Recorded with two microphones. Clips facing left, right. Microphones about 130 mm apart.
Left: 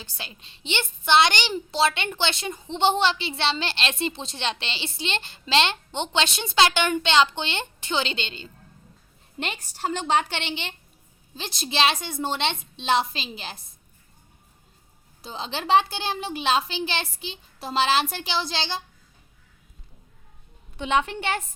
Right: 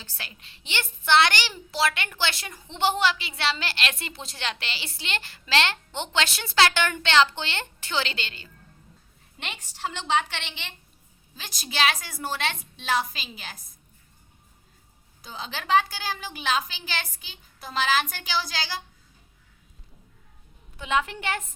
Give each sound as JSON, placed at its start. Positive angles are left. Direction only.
{"t": 0.0, "sound": "a woman's voice", "side_deg": 20}
{"t": 9.4, "sound": "a woman's voice", "side_deg": 40}
{"t": 15.2, "sound": "a woman's voice", "side_deg": 30}
{"t": 20.7, "sound": "a woman's voice", "side_deg": 25}